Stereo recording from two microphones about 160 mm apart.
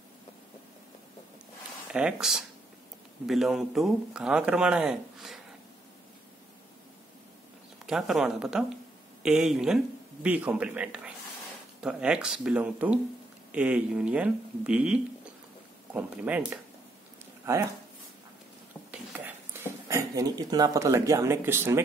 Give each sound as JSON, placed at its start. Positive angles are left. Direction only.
{"t": 1.9, "sound": "speech", "side_deg": -5}
{"t": 7.8, "sound": "speech", "side_deg": -5}
{"t": 18.9, "sound": "speech", "side_deg": -10}